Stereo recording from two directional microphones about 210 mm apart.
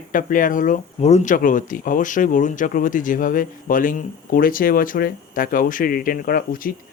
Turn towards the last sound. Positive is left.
turn(degrees=45)  # may be behind; listen again after turning